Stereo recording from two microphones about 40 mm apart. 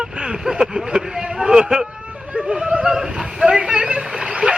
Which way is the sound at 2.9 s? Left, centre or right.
Centre.